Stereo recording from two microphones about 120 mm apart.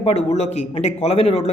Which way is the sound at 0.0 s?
65° left (ahead or behind).